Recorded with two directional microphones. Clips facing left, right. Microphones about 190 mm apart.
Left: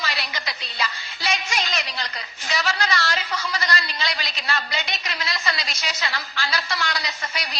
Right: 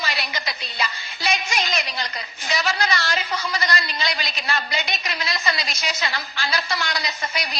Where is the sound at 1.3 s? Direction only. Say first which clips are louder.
Right 2 dB; 15° right (ahead or behind).